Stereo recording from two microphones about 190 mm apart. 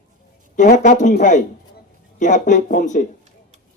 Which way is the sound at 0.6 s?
40° left (ahead or behind).